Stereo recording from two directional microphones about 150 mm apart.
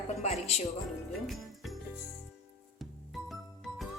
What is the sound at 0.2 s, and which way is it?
Music, 45° left (ahead or behind).